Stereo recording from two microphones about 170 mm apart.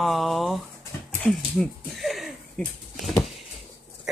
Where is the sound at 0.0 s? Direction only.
Centre (ahead or behind).